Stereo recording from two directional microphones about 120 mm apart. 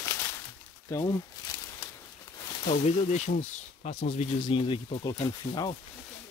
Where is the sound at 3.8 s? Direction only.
65° left (ahead or behind).